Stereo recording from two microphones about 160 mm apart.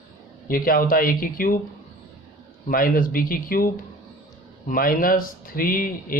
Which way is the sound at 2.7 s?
60° left (ahead or behind).